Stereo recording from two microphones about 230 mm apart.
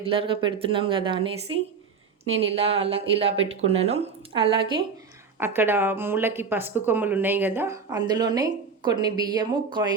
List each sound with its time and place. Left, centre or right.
0.0 s speech: right
5.4 s speech: centre